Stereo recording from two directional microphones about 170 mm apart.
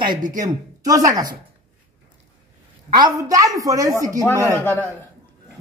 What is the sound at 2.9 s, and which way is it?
A woman's voice, 20° right (ahead or behind).